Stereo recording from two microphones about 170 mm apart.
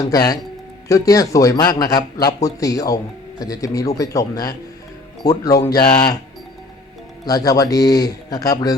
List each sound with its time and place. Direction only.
0.0 s speech: 20° left (ahead or behind)
7.3 s speech: 20° left (ahead or behind)